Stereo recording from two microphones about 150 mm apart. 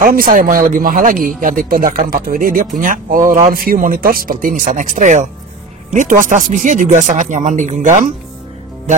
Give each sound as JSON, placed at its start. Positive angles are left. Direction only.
{"t": 0.0, "sound": "speech", "side_deg": -75}